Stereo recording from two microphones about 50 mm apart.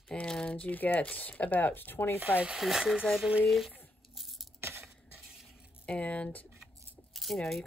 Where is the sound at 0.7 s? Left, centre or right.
Left.